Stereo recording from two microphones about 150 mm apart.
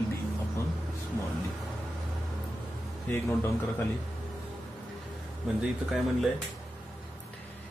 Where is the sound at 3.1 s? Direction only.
15° left (ahead or behind).